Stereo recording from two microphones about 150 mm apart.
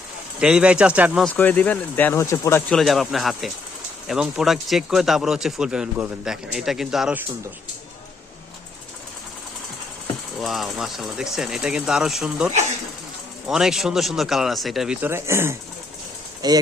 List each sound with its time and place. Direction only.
0.3 s speech: 5° right (ahead or behind)
1.4 s speech: 10° left (ahead or behind)
2.6 s speech: centre (ahead or behind)
10.4 s speech: centre (ahead or behind)
13.5 s speech: 5° right (ahead or behind)
15.0 s speech: 15° right (ahead or behind)